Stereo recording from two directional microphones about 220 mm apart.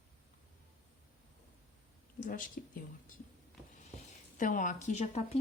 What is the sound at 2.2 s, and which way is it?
Speech, 35° left (ahead or behind).